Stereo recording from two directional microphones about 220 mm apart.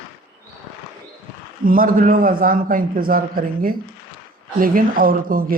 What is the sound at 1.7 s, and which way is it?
A man's voice, 40° right (ahead or behind).